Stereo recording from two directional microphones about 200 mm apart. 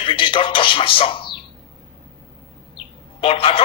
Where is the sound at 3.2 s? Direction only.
25° left (ahead or behind).